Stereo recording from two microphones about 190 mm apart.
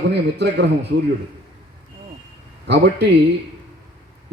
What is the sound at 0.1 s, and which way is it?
Speech, 60° right (ahead or behind).